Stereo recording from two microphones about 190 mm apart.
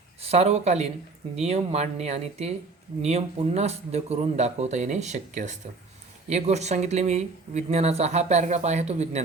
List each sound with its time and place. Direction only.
0.2 s speech: 35° right (ahead or behind)